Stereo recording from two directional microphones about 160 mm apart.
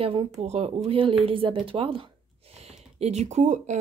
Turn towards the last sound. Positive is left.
turn(degrees=-50)  # may be behind; listen again after turning